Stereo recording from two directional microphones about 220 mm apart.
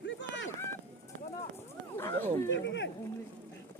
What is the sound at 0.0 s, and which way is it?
Run, 55° left (ahead or behind).